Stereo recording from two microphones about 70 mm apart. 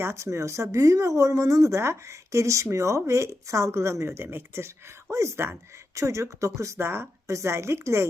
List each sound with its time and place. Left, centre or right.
0.0 s speech: right